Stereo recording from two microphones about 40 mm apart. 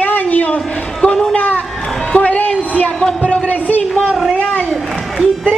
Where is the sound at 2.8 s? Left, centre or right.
Left.